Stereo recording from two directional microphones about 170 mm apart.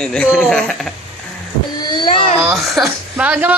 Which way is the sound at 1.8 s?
25° left (ahead or behind).